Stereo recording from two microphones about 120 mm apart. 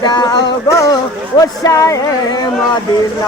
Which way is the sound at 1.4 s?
30° left (ahead or behind).